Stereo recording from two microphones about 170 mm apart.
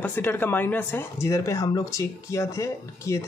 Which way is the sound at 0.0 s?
10° left (ahead or behind).